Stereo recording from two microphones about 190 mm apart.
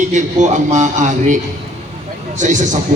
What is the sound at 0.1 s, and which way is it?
A man's voice, 40° right (ahead or behind).